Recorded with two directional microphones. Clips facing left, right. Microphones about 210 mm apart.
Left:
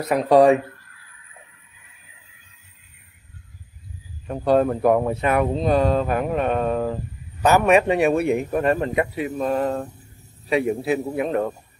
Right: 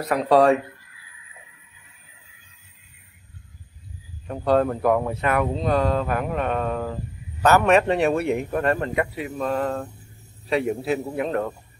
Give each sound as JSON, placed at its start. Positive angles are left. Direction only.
{"t": 0.0, "sound": "a man's voice", "side_deg": 15}
{"t": 4.3, "sound": "speech", "side_deg": 15}
{"t": 7.4, "sound": "a man's voice", "side_deg": 15}